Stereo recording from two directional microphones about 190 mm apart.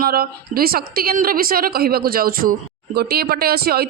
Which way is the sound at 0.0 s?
50° right (ahead or behind).